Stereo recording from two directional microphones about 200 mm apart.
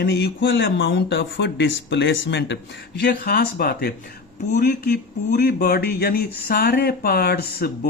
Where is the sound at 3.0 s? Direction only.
50° left (ahead or behind).